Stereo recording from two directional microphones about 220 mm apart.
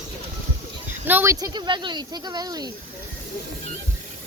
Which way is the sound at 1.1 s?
10° right (ahead or behind).